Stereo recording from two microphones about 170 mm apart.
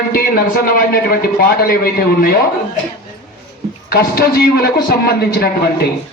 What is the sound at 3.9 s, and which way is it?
A man's voice, 65° left (ahead or behind).